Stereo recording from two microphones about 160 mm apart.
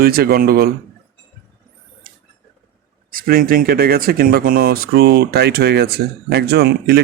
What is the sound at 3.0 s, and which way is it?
Speech, 65° right (ahead or behind).